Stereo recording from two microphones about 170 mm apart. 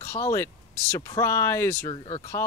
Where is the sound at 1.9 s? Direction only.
30° left (ahead or behind).